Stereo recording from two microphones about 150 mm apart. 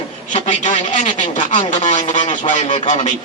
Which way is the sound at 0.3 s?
50° left (ahead or behind).